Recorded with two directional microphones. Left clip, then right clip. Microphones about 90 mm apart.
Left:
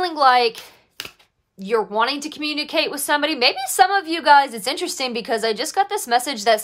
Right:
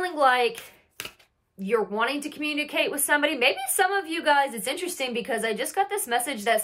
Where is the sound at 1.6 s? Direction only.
45° left (ahead or behind).